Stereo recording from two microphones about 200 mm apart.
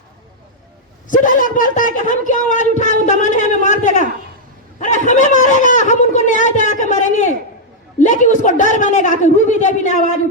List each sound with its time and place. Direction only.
1.0 s a woman's voice: 40° left (ahead or behind)
4.8 s a sound: 40° left (ahead or behind)
7.9 s a man's voice: 40° left (ahead or behind)